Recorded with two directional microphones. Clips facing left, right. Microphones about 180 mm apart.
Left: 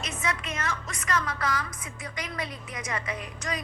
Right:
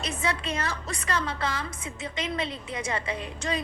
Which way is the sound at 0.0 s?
30° right (ahead or behind).